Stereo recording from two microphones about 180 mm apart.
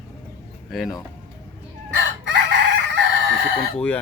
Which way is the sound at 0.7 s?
Centre (ahead or behind).